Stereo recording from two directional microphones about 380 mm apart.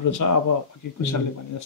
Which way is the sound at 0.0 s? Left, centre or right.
Left.